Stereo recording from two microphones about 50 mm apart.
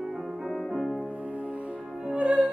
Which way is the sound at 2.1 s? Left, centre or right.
Right.